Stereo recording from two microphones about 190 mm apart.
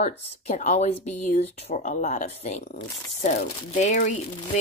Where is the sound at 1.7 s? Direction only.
45° left (ahead or behind).